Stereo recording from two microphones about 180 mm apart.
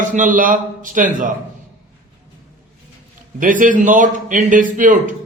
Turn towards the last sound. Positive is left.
turn(degrees=-45)  # may be behind; listen again after turning